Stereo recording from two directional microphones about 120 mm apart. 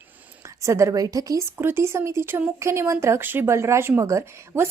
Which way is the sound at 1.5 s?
20° right (ahead or behind).